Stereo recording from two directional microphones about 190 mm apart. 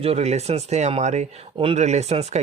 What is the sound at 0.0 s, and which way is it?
Speech, 35° right (ahead or behind).